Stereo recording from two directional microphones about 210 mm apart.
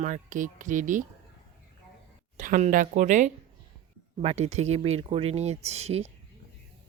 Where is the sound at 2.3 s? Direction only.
40° right (ahead or behind).